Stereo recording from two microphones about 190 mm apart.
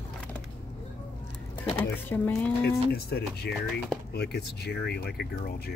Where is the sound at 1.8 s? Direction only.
10° left (ahead or behind).